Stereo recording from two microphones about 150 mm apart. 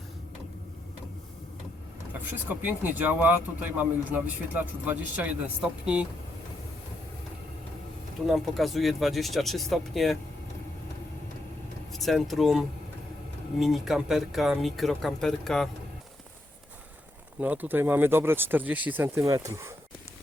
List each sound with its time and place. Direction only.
2.5 s speech: 10° right (ahead or behind)
8.3 s speech: centre (ahead or behind)
11.9 s speech: centre (ahead or behind)
17.4 s speech: 10° right (ahead or behind)